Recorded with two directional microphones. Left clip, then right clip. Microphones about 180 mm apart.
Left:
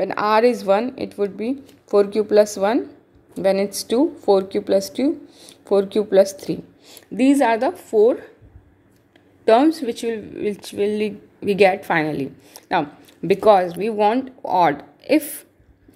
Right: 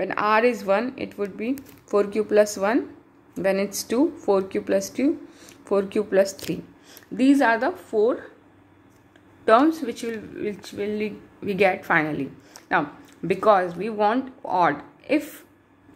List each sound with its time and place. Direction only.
0.0 s a woman's voice: 25° left (ahead or behind)
9.4 s a woman's voice: 25° left (ahead or behind)